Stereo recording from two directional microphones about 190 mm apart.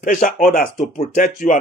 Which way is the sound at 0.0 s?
45° left (ahead or behind).